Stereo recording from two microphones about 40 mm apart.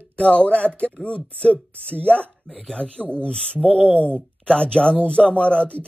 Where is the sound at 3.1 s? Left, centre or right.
Left.